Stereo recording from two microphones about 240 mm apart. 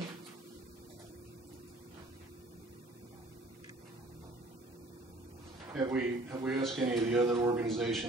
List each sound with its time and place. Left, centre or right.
5.7 s speech: centre
7.6 s speech: centre